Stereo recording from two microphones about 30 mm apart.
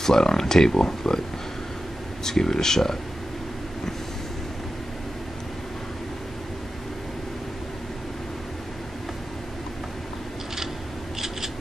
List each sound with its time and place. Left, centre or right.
0.0 s speech: centre
2.2 s speech: centre
11.1 s scissors: centre